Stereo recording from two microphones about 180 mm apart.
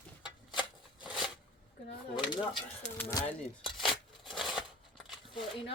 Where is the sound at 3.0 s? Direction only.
15° left (ahead or behind).